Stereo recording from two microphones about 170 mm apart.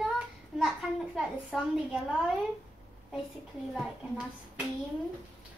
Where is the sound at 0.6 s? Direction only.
Centre (ahead or behind).